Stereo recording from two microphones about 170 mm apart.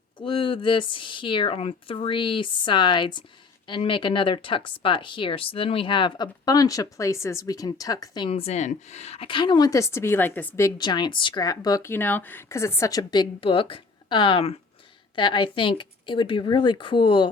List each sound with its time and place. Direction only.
0.2 s speech: 30° left (ahead or behind); by 10.7 s 10° left (ahead or behind)
10.8 s speech: 25° left (ahead or behind)